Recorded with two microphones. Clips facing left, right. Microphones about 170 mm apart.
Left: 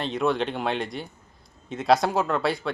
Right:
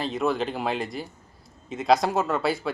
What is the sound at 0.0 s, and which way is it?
Speech, centre (ahead or behind).